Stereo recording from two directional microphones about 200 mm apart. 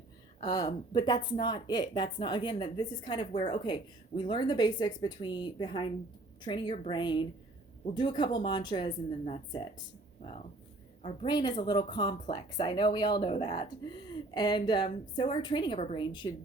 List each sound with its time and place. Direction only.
0.3 s speech: 20° left (ahead or behind)
11.0 s speech: 25° left (ahead or behind)